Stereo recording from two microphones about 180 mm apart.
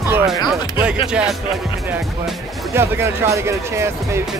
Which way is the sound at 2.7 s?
15° right (ahead or behind).